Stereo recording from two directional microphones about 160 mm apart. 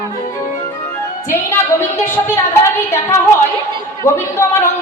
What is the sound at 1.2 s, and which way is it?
Speech, 15° left (ahead or behind).